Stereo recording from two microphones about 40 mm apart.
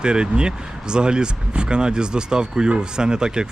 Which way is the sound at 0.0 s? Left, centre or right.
Right.